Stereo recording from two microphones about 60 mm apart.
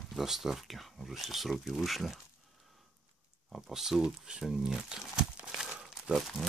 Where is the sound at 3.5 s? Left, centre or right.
Centre.